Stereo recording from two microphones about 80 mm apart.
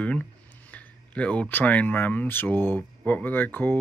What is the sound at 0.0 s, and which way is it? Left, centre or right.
Speech, centre.